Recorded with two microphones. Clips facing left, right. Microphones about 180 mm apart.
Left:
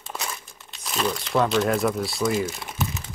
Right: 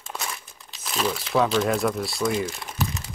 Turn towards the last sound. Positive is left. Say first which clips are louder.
# even
turn(degrees=0)  # may be behind; listen again after turning